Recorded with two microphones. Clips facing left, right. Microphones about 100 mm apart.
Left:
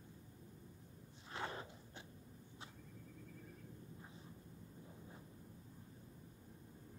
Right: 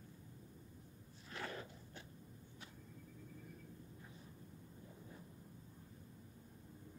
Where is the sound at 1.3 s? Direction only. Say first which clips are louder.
Left 1 dB; 25° left (ahead or behind).